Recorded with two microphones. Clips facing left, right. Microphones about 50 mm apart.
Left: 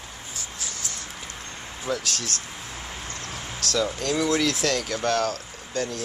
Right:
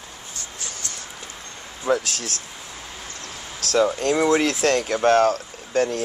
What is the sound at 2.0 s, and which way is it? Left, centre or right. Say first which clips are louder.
Speech: even; left.